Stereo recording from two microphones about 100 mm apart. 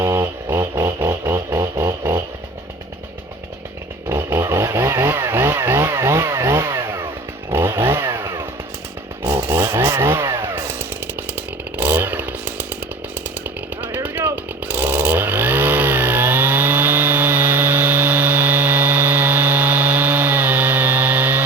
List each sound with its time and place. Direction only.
0.0 s music: 25° right (ahead or behind)
4.1 s chainsaw: 25° right (ahead or behind)
9.2 s chainsaw: 20° right (ahead or behind)